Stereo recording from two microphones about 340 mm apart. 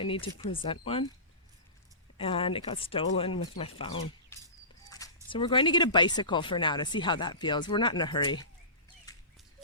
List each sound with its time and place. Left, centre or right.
0.1 s speech: centre
2.1 s speech: centre
9.1 s a sound: centre